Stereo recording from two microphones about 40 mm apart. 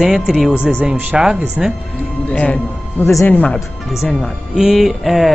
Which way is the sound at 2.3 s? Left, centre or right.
Left.